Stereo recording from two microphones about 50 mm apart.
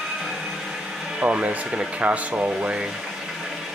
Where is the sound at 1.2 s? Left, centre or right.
Right.